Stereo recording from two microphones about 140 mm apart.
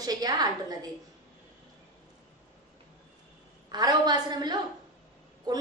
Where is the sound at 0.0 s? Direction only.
25° right (ahead or behind).